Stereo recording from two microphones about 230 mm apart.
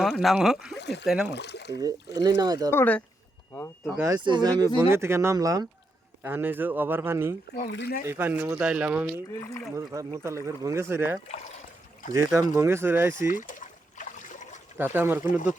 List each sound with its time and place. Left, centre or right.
0.0 s speech: centre
0.8 s speech: left
1.0 s speech: centre
1.3 s speech: left
1.8 s speech: centre
2.7 s speech: centre
3.8 s speech: centre
7.7 s speech: left
8.0 s speech: centre
9.3 s speech: centre
9.7 s speech: centre
13.2 s trickle: left
14.8 s speech: centre